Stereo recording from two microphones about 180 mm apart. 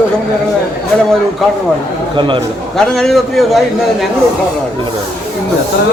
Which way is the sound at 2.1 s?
25° right (ahead or behind).